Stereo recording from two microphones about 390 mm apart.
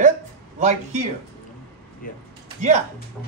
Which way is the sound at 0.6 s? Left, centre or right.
Centre.